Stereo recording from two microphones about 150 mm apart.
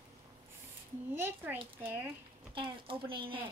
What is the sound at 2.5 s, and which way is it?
Speech, 35° right (ahead or behind).